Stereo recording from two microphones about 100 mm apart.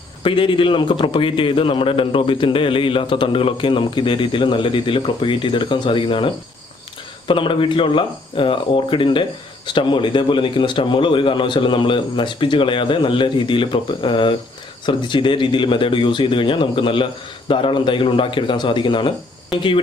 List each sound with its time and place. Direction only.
0.2 s a man's voice: 55° left (ahead or behind)